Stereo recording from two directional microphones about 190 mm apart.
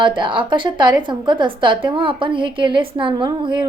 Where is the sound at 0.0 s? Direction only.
25° right (ahead or behind).